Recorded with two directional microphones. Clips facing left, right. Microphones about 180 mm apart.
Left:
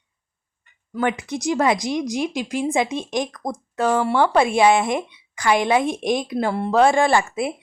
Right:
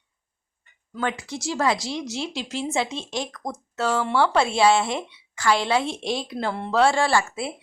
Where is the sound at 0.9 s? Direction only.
15° left (ahead or behind).